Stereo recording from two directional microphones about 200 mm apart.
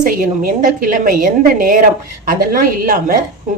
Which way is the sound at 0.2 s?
45° right (ahead or behind).